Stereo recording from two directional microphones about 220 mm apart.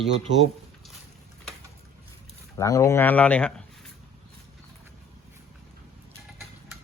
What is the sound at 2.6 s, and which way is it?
Speech, 15° left (ahead or behind).